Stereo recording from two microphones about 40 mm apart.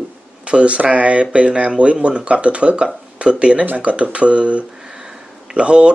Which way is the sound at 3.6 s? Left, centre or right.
Right.